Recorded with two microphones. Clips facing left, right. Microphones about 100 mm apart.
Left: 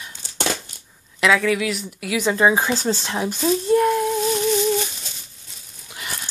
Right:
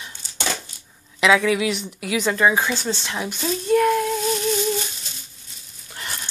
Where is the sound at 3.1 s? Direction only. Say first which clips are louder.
Left 4 dB; 25° left (ahead or behind).